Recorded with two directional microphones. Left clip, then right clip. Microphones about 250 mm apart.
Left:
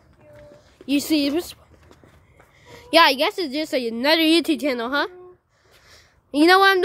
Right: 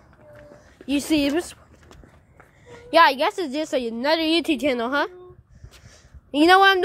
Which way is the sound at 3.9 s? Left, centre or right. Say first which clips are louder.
Left 5 dB; centre.